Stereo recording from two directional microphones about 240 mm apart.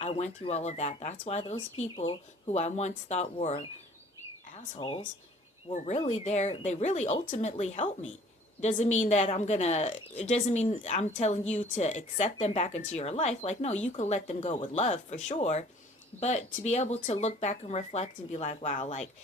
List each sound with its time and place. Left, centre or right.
0.0 s a woman's voice: left
4.7 s a woman's voice: left